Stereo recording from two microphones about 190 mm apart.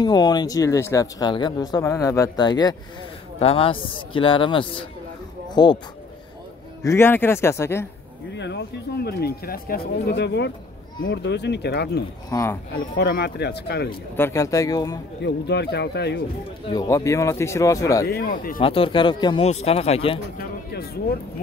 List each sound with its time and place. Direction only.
0.0 s speech: 20° left (ahead or behind)
6.8 s speech: 15° left (ahead or behind)
8.4 s speech: 65° left (ahead or behind)
12.3 s speech: 15° left (ahead or behind)
12.7 s speech: 55° left (ahead or behind)
14.1 s speech: 15° left (ahead or behind)
15.2 s speech: 60° left (ahead or behind)
16.6 s speech: 20° left (ahead or behind)
18.0 s speech: 50° left (ahead or behind)
18.6 s speech: 30° left (ahead or behind)